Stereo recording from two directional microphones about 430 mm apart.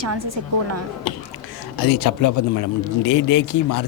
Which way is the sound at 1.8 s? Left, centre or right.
Left.